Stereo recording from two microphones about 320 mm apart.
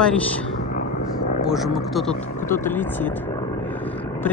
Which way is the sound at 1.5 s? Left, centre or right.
Centre.